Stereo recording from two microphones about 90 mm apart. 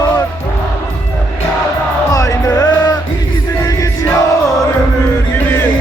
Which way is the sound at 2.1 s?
40° left (ahead or behind).